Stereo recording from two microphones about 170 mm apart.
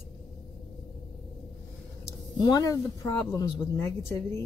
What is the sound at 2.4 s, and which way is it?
A woman's voice, 25° left (ahead or behind).